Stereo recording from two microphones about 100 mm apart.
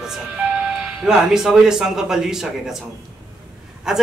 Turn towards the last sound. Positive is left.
turn(degrees=-5)  # may be behind; listen again after turning